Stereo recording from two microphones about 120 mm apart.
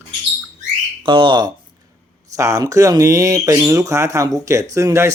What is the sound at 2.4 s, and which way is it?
Speech, 30° right (ahead or behind).